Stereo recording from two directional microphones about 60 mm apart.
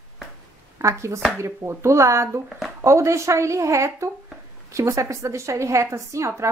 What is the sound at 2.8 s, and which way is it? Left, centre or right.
A woman's voice, right.